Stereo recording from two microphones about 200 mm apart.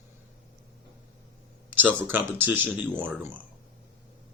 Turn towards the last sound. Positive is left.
turn(degrees=-10)  # may be behind; listen again after turning